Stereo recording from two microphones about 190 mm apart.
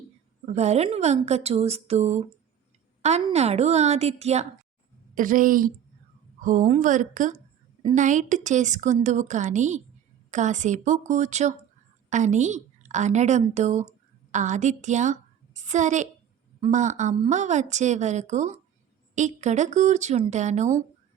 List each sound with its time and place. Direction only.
0.5 s a woman's voice: 35° right (ahead or behind)
5.1 s a woman's voice: 45° right (ahead or behind)